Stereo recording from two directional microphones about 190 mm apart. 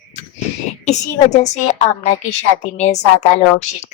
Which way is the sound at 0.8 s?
35° left (ahead or behind).